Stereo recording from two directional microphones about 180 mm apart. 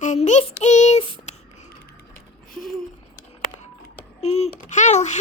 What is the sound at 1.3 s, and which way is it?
Whispering, 40° left (ahead or behind).